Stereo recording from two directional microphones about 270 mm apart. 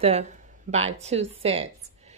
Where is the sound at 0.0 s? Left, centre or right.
Right.